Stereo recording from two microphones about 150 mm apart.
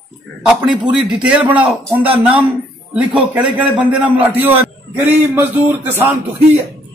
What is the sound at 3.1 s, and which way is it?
A man's voice, 10° right (ahead or behind).